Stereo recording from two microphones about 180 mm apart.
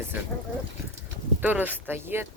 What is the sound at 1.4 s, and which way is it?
Speech, 10° right (ahead or behind).